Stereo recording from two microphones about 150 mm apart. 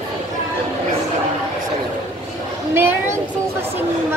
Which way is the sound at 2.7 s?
15° right (ahead or behind).